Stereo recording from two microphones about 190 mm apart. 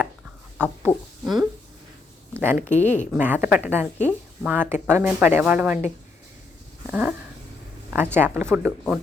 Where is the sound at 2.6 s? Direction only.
40° left (ahead or behind).